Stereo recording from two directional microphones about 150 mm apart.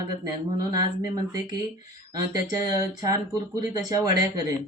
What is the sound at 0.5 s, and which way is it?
Speech, 25° right (ahead or behind).